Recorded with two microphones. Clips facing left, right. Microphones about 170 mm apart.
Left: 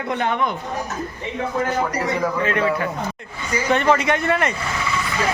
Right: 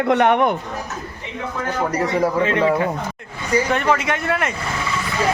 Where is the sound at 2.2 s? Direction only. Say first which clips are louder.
Right 3 dB; 25° right (ahead or behind).